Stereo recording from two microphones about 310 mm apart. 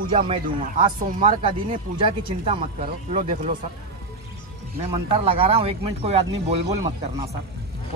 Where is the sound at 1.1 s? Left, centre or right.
Centre.